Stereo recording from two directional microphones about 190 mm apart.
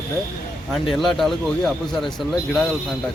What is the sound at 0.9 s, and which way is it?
Speech, centre (ahead or behind).